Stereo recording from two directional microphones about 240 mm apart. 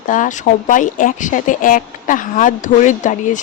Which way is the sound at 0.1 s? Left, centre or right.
Left.